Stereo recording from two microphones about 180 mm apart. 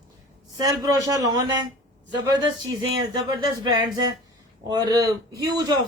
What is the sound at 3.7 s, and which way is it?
A woman's voice, 20° right (ahead or behind).